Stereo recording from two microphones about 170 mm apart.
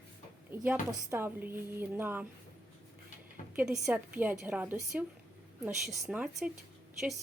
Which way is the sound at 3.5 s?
5° right (ahead or behind).